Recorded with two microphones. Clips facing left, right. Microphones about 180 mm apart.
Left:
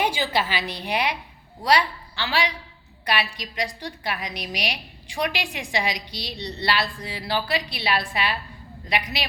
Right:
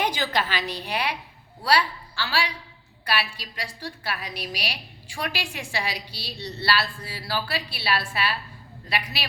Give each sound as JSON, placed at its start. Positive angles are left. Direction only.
{"t": 0.0, "sound": "a woman's voice", "side_deg": 10}